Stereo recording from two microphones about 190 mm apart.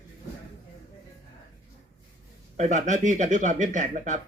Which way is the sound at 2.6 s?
40° right (ahead or behind).